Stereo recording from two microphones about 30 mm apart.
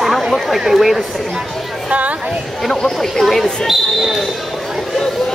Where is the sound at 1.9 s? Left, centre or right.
Right.